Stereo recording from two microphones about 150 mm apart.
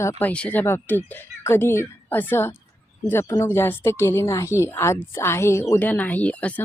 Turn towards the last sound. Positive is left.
turn(degrees=10)  # may be behind; listen again after turning